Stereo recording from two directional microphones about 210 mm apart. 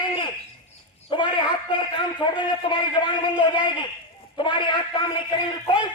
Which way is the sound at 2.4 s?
25° left (ahead or behind).